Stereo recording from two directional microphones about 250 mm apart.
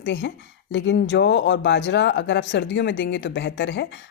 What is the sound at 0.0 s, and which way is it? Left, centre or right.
Speech, left.